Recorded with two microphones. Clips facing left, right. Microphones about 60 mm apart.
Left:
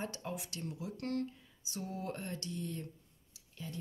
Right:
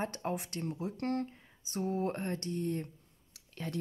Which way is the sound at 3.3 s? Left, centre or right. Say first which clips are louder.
Right 6 dB; right.